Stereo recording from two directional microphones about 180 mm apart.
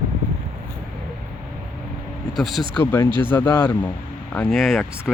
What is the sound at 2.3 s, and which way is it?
Speech, centre (ahead or behind).